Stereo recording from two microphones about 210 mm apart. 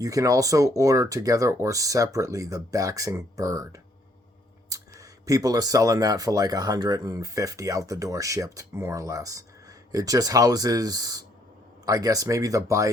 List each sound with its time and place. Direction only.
0.0 s speech: 15° right (ahead or behind)